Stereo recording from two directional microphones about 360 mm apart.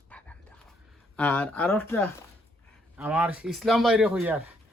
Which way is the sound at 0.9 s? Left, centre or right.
Centre.